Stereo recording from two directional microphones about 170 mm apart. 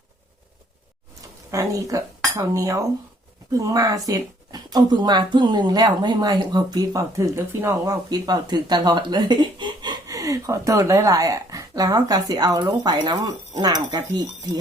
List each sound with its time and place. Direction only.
1.5 s speech: 20° right (ahead or behind)